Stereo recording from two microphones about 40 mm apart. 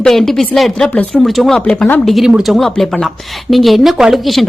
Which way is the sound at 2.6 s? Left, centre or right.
Centre.